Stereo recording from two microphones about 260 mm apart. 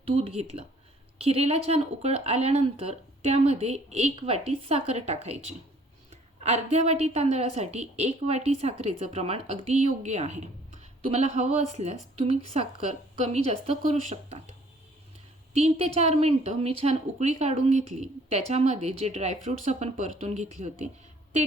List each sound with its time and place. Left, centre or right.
0.0 s a woman's voice: right
15.5 s a woman's voice: right